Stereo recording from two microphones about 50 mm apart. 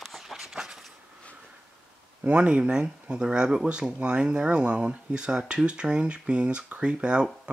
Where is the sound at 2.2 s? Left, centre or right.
Right.